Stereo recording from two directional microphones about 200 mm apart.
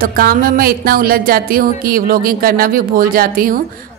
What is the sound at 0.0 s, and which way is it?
Speech, 45° right (ahead or behind).